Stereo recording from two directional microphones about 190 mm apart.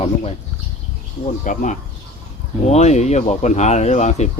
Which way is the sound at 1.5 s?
40° left (ahead or behind).